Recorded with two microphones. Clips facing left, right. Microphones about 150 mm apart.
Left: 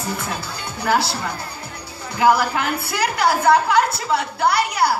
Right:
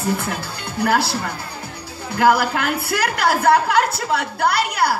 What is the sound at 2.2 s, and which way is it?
A woman's voice, 60° right (ahead or behind).